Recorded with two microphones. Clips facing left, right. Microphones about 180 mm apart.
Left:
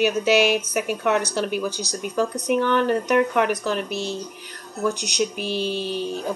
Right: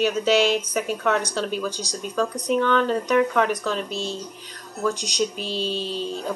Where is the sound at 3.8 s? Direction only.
70° left (ahead or behind).